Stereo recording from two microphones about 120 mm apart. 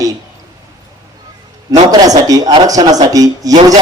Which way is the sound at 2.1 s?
30° right (ahead or behind).